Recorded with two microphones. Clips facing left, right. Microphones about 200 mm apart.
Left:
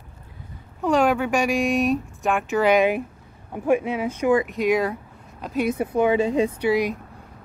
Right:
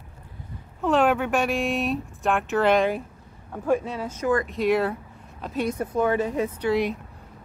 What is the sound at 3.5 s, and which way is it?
Speech, 15° left (ahead or behind).